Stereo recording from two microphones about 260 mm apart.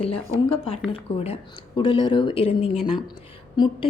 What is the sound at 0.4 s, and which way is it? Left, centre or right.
A woman's voice, left.